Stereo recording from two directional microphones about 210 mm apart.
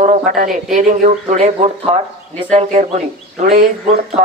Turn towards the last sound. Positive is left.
turn(degrees=-35)  # may be behind; listen again after turning